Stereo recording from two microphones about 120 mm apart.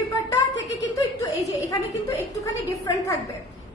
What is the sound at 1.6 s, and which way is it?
A woman's voice, 30° left (ahead or behind).